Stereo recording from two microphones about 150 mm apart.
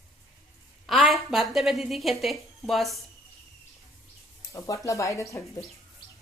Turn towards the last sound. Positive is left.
turn(degrees=20)  # may be behind; listen again after turning